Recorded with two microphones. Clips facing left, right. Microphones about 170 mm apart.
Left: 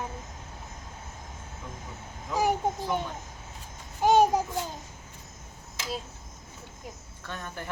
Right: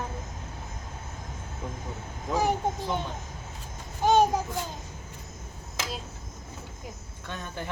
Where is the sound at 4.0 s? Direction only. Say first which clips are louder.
Left 1 dB; 10° left (ahead or behind).